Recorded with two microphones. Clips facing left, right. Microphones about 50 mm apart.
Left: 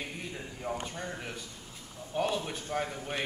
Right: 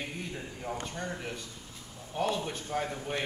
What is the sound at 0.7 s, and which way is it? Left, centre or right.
Speech, centre.